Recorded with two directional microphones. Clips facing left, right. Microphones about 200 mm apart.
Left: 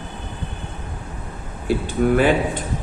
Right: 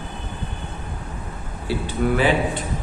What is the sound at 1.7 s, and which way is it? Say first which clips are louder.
Speech: left 4 dB; 50° left (ahead or behind).